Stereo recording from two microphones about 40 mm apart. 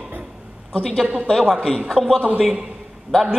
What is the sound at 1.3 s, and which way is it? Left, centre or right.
Speech, centre.